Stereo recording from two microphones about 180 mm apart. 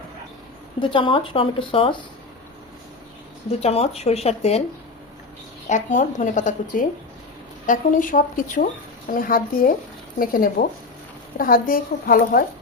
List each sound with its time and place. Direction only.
0.8 s a woman's voice: 30° left (ahead or behind)
3.6 s speech: 35° left (ahead or behind)
5.6 s speech: 45° left (ahead or behind)